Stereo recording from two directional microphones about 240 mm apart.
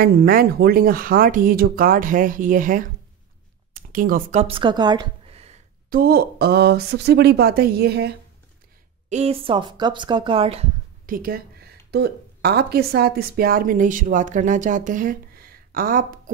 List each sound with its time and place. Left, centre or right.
0.0 s speech: right
9.1 s speech: right
11.1 s a woman's voice: right